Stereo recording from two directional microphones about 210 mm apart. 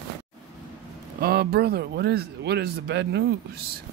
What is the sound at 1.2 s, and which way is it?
Speech, 50° right (ahead or behind).